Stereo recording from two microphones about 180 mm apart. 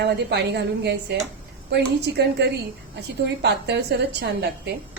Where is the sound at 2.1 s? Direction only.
90° right.